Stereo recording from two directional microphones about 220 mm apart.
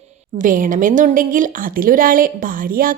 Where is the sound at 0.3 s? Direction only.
35° right (ahead or behind).